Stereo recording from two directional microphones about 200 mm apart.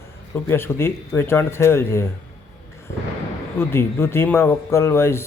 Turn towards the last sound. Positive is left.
turn(degrees=10)  # may be behind; listen again after turning